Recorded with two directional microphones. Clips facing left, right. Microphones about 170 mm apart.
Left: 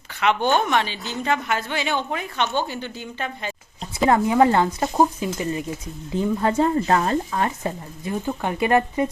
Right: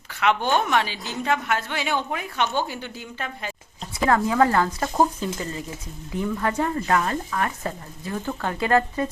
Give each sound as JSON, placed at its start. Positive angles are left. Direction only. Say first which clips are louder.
{"t": 0.1, "sound": "a woman's voice", "louder": "left 2 dB", "side_deg": 0}
{"t": 4.0, "sound": "speech", "louder": "left 3 dB", "side_deg": 20}